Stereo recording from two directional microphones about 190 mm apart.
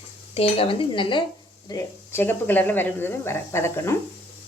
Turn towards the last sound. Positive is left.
turn(degrees=15)  # may be behind; listen again after turning